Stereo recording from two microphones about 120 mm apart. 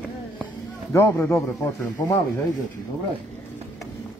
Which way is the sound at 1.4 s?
30° left (ahead or behind).